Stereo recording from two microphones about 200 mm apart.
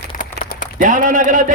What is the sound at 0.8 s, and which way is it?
Speech, 40° right (ahead or behind).